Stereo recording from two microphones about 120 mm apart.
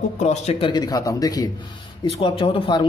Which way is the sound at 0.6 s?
35° left (ahead or behind).